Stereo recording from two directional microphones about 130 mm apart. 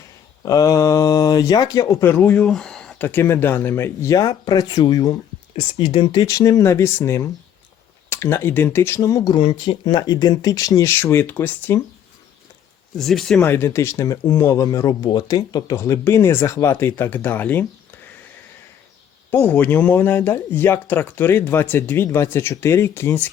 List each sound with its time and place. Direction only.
0.4 s speech: 25° left (ahead or behind)
2.0 s speech: 15° left (ahead or behind)
3.0 s speech: 15° left (ahead or behind)
13.0 s speech: 5° left (ahead or behind)
13.4 s speech: 20° left (ahead or behind)
19.3 s speech: 15° left (ahead or behind)